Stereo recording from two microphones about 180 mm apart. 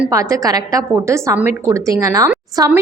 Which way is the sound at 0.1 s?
20° right (ahead or behind).